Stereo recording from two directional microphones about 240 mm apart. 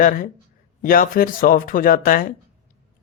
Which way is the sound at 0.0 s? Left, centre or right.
Left.